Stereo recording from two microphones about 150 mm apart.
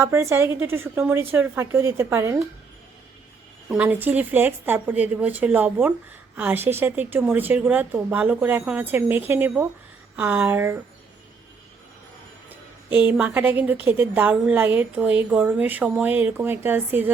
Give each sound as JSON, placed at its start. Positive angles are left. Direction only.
{"t": 0.0, "sound": "a woman's voice", "side_deg": -20}
{"t": 3.7, "sound": "a woman's voice", "side_deg": -10}
{"t": 12.5, "sound": "a woman's voice", "side_deg": -10}